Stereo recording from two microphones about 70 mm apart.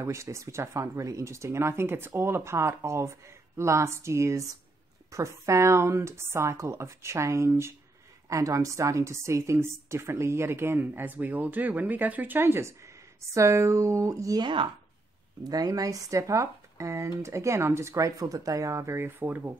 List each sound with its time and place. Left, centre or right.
0.0 s a woman's voice: right
8.3 s a woman's voice: right
12.4 s speech: right
15.4 s speech: right
18.9 s speech: right